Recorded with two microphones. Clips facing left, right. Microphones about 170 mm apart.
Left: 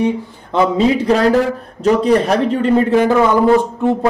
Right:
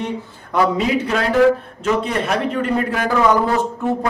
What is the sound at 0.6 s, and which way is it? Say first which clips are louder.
Speech: left 4 dB; 30° left (ahead or behind).